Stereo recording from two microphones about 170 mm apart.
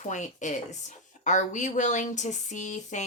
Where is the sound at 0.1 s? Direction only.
45° left (ahead or behind).